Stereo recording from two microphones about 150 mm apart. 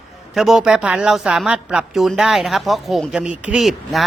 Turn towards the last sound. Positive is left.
turn(degrees=0)  # may be behind; listen again after turning